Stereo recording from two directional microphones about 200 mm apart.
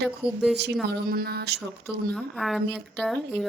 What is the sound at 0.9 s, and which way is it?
Speech, 50° right (ahead or behind).